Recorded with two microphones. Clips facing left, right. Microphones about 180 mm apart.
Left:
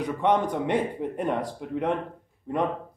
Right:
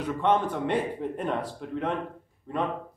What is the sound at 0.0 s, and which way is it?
Speech, 15° left (ahead or behind).